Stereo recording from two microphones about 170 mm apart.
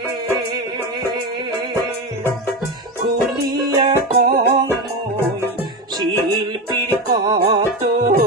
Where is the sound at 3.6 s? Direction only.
30° right (ahead or behind).